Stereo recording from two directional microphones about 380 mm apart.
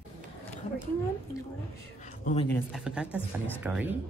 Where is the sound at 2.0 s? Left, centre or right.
Centre.